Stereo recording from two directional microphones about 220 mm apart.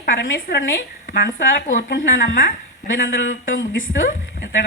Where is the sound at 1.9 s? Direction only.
50° left (ahead or behind).